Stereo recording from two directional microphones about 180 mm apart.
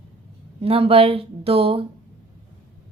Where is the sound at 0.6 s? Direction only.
35° right (ahead or behind).